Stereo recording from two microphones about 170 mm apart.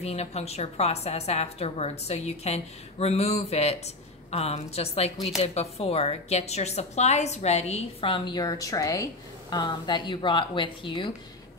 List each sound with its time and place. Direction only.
0.0 s a woman's voice: 40° left (ahead or behind)